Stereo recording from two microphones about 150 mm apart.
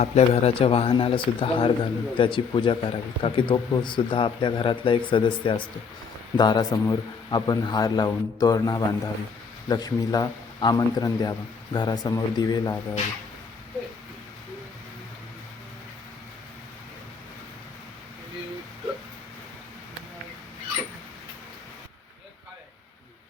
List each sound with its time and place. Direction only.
0.0 s a man's voice: 45° left (ahead or behind); by 12.7 s 25° left (ahead or behind)